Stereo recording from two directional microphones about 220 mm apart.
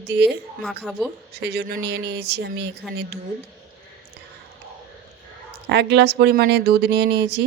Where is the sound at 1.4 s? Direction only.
45° right (ahead or behind).